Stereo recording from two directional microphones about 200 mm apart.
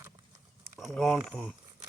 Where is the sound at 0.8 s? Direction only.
Centre (ahead or behind).